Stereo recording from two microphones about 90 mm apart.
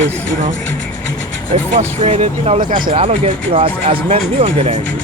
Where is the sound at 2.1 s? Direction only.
90° right.